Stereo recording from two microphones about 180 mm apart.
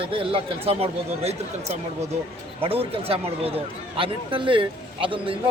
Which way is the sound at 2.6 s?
30° right (ahead or behind).